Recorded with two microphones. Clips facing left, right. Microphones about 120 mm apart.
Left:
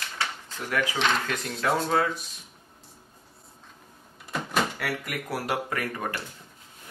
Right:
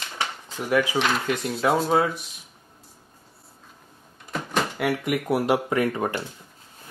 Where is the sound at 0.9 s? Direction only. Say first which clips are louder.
Right 3 dB; 5° right (ahead or behind).